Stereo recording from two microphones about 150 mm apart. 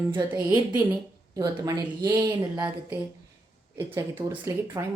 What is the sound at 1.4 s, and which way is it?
Speech, 25° right (ahead or behind).